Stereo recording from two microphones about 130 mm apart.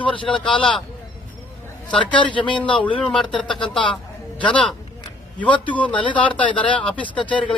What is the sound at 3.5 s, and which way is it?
Speech, 40° left (ahead or behind).